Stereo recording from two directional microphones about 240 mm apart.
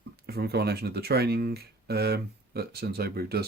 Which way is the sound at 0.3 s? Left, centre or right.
Right.